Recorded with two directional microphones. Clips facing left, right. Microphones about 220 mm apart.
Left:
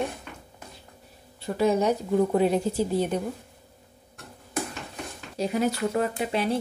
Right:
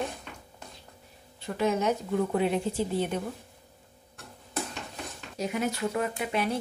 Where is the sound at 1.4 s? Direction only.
35° left (ahead or behind).